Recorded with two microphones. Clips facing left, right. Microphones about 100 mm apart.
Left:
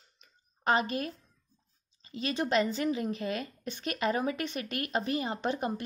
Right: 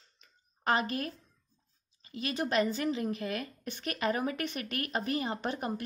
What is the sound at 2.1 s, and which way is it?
A woman's voice, 25° left (ahead or behind).